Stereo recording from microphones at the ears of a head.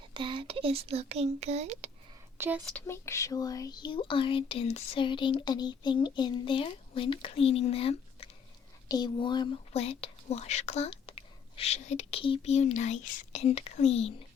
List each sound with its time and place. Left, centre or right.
0.2 s speech: right
2.9 s speech: left